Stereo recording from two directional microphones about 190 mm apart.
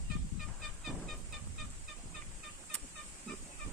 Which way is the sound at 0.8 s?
Centre (ahead or behind).